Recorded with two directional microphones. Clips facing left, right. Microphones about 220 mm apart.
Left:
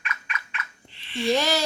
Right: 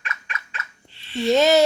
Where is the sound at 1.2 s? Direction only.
20° right (ahead or behind).